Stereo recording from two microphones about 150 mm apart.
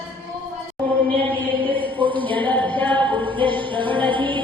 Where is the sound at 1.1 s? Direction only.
10° left (ahead or behind).